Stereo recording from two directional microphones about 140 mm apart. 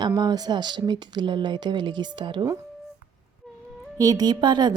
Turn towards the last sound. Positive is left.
turn(degrees=-30)  # may be behind; listen again after turning